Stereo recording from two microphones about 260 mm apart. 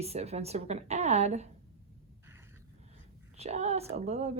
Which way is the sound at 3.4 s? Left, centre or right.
Right.